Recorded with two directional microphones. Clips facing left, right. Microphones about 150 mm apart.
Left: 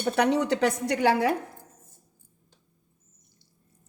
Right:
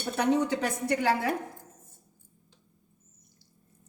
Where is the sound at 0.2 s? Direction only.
70° left (ahead or behind).